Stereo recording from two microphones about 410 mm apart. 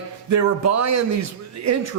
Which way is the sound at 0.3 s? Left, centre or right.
Right.